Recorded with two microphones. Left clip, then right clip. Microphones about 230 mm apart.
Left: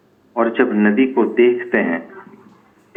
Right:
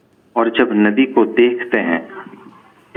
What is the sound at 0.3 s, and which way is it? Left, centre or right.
A man's voice, right.